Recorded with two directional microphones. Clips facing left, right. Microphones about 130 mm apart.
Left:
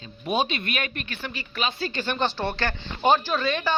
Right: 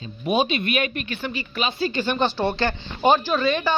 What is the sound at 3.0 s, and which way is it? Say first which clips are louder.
Speech: right 3 dB; 5° right (ahead or behind).